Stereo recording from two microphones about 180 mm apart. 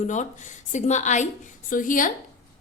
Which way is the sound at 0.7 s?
40° left (ahead or behind).